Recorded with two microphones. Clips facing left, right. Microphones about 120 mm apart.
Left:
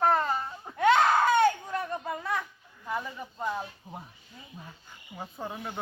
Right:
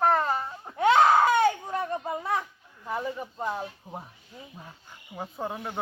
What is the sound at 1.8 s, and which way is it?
Speech, 35° right (ahead or behind).